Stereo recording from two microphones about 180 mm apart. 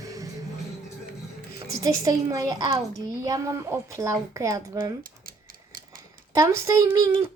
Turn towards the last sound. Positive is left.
turn(degrees=-15)  # may be behind; listen again after turning